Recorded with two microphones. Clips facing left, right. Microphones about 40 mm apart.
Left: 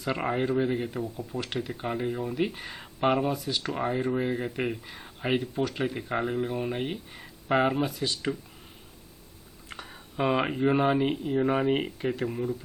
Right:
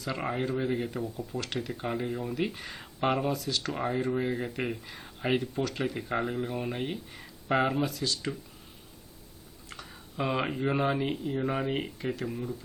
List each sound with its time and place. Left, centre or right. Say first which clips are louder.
0.3 s speech: left 3 dB; centre
7.7 s speech: left 2 dB; centre
9.6 s a sound: left 3 dB; left
10.2 s speech: left 5 dB; centre